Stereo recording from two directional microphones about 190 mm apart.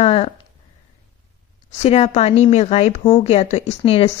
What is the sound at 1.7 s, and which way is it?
A woman's voice, 35° left (ahead or behind).